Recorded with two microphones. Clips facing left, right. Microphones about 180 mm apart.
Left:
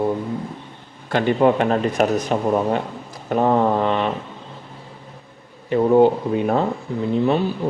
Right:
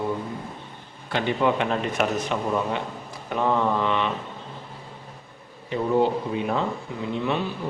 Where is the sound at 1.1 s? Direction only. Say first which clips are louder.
Left 6 dB; 45° left (ahead or behind).